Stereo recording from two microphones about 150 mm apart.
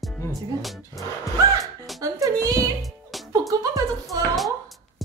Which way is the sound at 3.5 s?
20° right (ahead or behind).